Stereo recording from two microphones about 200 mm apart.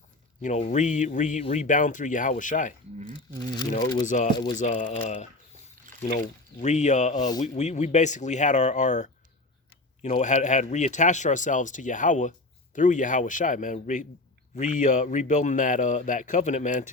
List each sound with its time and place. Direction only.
0.4 s speech: 35° left (ahead or behind)
4.0 s speech: 40° left (ahead or behind)